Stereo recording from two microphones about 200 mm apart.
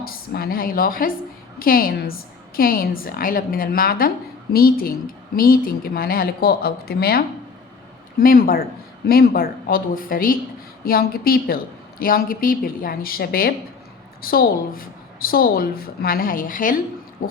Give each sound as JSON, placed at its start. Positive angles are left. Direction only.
{"t": 0.0, "sound": "a woman's voice", "side_deg": 50}